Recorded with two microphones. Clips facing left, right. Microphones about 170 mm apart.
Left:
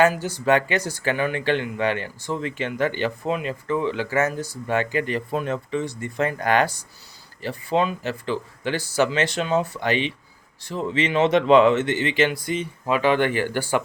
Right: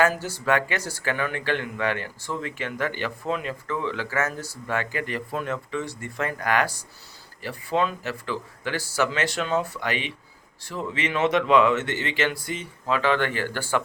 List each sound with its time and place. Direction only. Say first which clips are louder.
0.0 s speech: left 3 dB; 15° left (ahead or behind)